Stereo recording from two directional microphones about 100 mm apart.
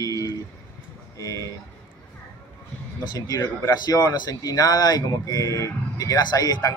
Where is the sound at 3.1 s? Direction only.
40° left (ahead or behind).